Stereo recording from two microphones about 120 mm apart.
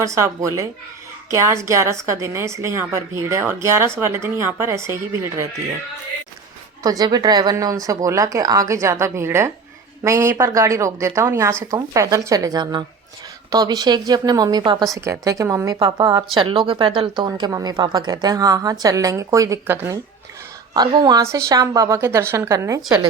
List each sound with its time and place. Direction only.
0.0 s a woman's voice: 25° right (ahead or behind)
6.8 s a woman's voice: 30° right (ahead or behind)
14.9 s a woman's voice: 25° right (ahead or behind); by 17.2 s 45° right (ahead or behind)
17.2 s a woman's voice: 35° right (ahead or behind)
20.7 s a woman's voice: 35° right (ahead or behind)